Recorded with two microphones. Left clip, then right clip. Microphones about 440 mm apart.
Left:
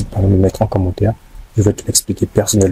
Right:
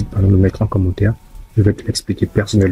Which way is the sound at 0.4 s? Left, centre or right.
Left.